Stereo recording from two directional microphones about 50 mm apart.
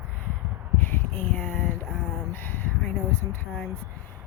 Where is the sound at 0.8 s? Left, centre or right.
Left.